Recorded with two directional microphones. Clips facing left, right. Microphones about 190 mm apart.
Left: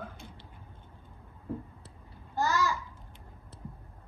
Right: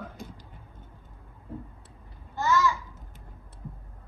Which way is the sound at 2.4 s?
35° left (ahead or behind).